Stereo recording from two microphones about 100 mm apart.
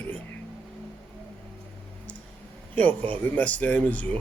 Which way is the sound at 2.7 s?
15° left (ahead or behind).